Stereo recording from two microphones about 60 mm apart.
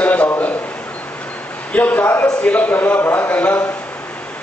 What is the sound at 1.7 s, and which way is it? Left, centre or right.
Speech, left.